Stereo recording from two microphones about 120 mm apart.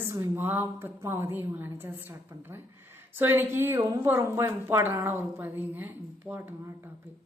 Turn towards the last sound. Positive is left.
turn(degrees=-15)  # may be behind; listen again after turning